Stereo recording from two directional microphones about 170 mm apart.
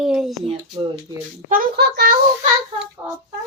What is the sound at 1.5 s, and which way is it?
Speech, 65° right (ahead or behind).